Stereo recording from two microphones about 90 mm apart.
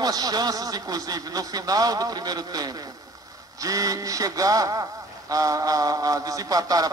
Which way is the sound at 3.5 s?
40° right (ahead or behind).